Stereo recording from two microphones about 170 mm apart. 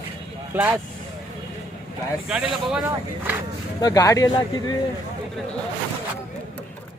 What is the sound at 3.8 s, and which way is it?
Speech, 20° left (ahead or behind).